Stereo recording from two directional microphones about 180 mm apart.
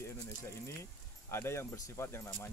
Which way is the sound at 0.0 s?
15° left (ahead or behind).